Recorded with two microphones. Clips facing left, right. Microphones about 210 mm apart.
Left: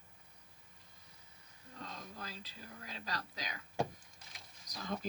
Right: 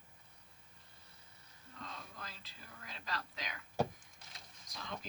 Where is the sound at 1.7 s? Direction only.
40° left (ahead or behind).